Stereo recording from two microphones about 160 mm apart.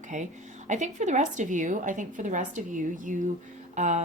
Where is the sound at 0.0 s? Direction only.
50° right (ahead or behind).